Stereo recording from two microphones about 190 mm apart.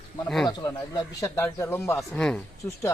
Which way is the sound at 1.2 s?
15° left (ahead or behind).